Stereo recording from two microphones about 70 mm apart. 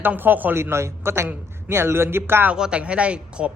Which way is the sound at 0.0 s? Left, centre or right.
Right.